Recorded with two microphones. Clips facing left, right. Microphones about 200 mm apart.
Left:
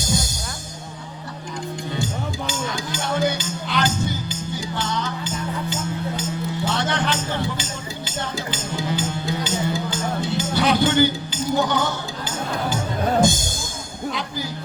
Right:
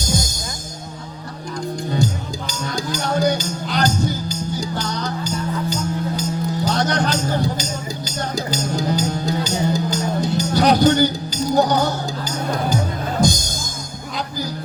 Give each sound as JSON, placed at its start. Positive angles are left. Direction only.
{"t": 0.0, "sound": "music", "side_deg": -40}
{"t": 2.5, "sound": "music", "side_deg": -40}
{"t": 13.2, "sound": "music", "side_deg": -40}